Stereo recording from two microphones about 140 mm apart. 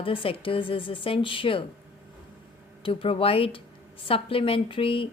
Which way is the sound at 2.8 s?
40° left (ahead or behind).